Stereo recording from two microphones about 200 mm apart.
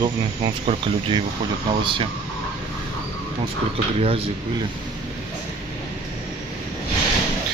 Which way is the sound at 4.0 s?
30° right (ahead or behind).